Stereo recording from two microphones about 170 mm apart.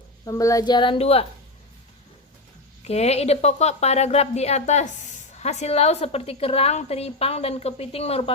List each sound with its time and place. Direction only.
0.3 s a woman's voice: 20° left (ahead or behind); by 1.3 s 35° left (ahead or behind)
2.8 s speech: 40° left (ahead or behind)